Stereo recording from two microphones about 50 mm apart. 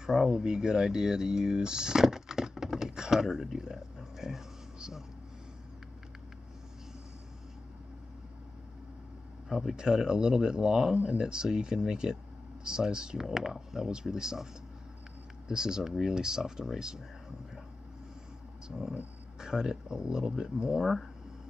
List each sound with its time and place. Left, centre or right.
0.0 s speech: centre
9.5 s speech: centre
18.7 s speech: centre
20.8 s speech: centre